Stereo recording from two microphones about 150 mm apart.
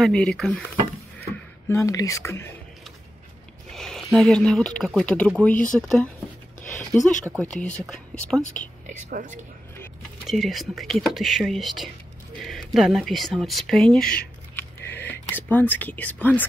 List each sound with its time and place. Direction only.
0.0 s speech: 5° left (ahead or behind)
1.3 s speech: 20° left (ahead or behind)
3.7 s speech: centre (ahead or behind)
8.3 s speech: 15° right (ahead or behind)
8.8 s speech: 55° right (ahead or behind)
10.2 s speech: centre (ahead or behind)